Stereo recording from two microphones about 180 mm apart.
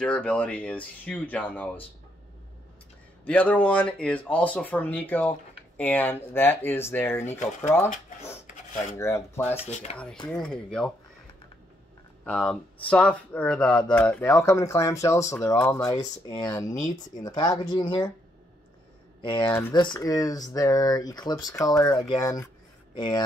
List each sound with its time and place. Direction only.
0.0 s speech: 5° left (ahead or behind)
3.3 s speech: 5° left (ahead or behind)
8.9 s speech: 15° left (ahead or behind)
12.3 s speech: 5° left (ahead or behind); by 18.1 s 25° left (ahead or behind)
19.2 s speech: 25° left (ahead or behind)